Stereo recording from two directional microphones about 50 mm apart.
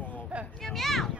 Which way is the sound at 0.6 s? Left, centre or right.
Centre.